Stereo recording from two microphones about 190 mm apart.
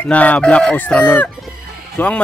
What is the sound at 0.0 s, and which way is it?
Speech, 10° left (ahead or behind).